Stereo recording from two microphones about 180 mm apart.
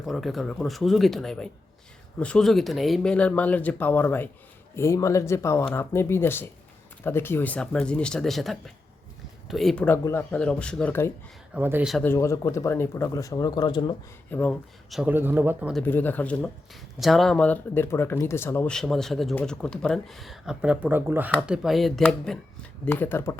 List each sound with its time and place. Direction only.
0.0 s speech: centre (ahead or behind)
11.5 s speech: 10° right (ahead or behind)
12.0 s speech: 15° left (ahead or behind)
14.3 s speech: 10° left (ahead or behind)
15.1 s speech: 10° right (ahead or behind)
15.7 s speech: 10° left (ahead or behind)